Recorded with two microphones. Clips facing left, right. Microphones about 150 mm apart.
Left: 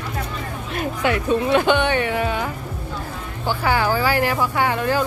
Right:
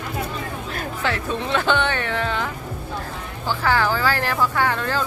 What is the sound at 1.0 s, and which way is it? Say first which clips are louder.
Speech: left 6 dB; 15° left (ahead or behind).